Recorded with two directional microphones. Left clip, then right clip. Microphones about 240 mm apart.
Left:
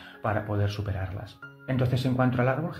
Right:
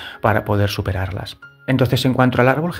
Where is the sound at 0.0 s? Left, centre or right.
Right.